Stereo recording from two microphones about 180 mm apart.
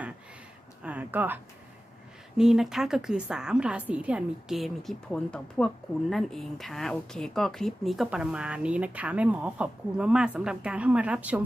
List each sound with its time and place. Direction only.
0.8 s speech: 5° right (ahead or behind)
2.4 s a woman's voice: 5° right (ahead or behind)